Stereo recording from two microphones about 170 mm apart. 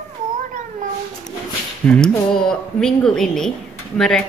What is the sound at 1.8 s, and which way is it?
Speech, 5° left (ahead or behind).